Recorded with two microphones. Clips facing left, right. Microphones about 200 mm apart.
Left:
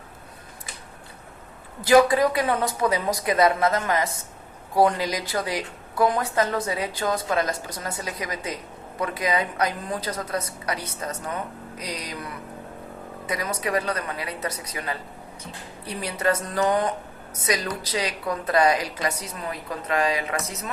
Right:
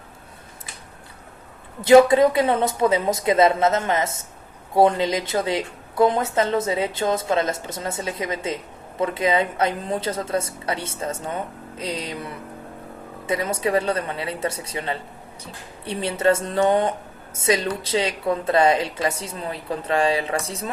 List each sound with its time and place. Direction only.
1.8 s speech: 25° right (ahead or behind)